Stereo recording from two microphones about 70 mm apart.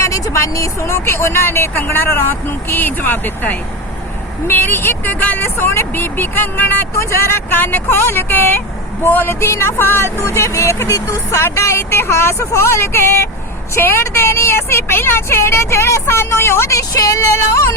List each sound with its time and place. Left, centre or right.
0.0 s a woman's voice: left
6.9 s a woman's voice: left
10.9 s music: left
11.4 s a woman's voice: left
16.7 s music: left